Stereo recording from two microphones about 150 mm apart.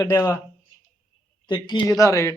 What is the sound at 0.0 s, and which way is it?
Speech, 20° left (ahead or behind).